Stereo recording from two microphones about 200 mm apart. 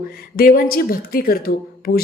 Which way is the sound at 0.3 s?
45° left (ahead or behind).